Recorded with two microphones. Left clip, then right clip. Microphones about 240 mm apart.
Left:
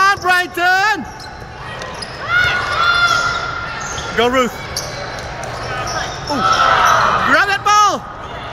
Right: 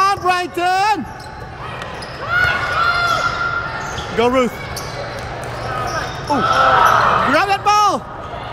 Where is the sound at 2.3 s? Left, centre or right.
Right.